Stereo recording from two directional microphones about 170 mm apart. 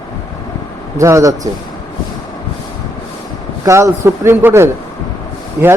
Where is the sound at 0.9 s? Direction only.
20° right (ahead or behind).